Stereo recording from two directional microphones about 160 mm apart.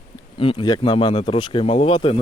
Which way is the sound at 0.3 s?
35° left (ahead or behind).